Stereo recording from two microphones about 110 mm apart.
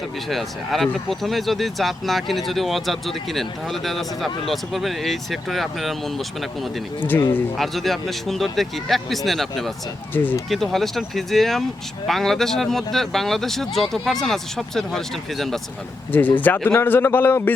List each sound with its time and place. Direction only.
0.3 s speech: centre (ahead or behind)
7.0 s speech: 20° left (ahead or behind)
7.5 s speech: centre (ahead or behind)
10.1 s speech: 20° left (ahead or behind)
10.5 s speech: centre (ahead or behind)
16.1 s speech: 15° left (ahead or behind)